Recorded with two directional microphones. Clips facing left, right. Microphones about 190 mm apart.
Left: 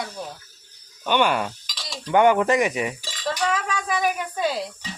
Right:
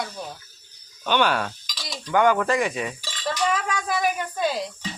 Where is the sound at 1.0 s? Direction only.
10° left (ahead or behind).